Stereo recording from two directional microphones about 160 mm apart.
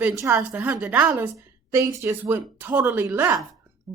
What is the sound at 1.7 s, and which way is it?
A woman's voice, 20° right (ahead or behind).